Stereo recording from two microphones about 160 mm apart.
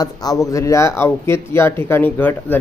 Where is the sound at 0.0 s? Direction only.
20° left (ahead or behind).